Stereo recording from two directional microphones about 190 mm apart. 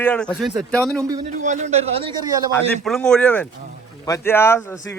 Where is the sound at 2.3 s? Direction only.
20° right (ahead or behind).